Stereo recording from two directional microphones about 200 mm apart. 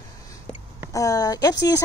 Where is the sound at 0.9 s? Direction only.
15° left (ahead or behind).